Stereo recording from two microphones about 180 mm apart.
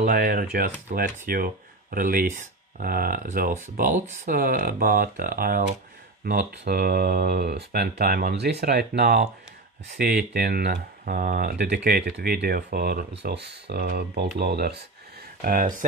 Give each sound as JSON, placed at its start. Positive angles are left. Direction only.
{"t": 0.0, "sound": "speech", "side_deg": -55}
{"t": 6.2, "sound": "speech", "side_deg": -65}
{"t": 13.2, "sound": "speech", "side_deg": -65}
{"t": 15.4, "sound": "speech", "side_deg": -50}